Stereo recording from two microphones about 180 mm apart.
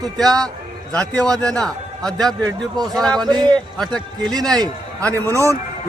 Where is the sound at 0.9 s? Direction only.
5° left (ahead or behind).